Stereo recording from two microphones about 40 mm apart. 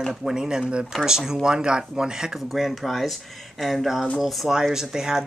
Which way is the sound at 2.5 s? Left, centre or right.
Centre.